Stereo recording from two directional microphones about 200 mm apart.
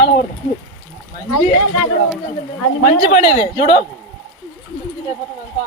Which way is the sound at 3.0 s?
35° left (ahead or behind).